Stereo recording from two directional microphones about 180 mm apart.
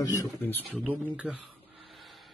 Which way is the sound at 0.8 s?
10° right (ahead or behind).